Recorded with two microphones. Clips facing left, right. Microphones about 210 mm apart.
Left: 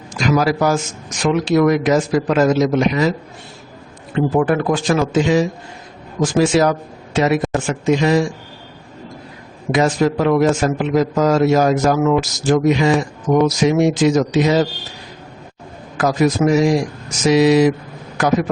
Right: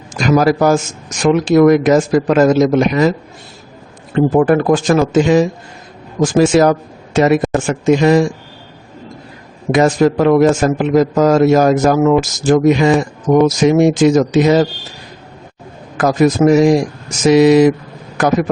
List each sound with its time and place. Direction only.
0.1 s a man's voice: 50° right (ahead or behind)
4.1 s a man's voice: 45° right (ahead or behind)
6.4 s a man's voice: 50° right (ahead or behind)
9.7 s a man's voice: 50° right (ahead or behind)
16.0 s a man's voice: 50° right (ahead or behind)